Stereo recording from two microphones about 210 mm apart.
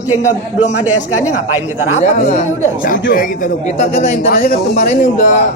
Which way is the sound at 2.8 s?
40° left (ahead or behind).